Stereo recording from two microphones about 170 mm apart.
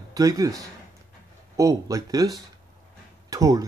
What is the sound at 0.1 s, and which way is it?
Speech, 20° right (ahead or behind).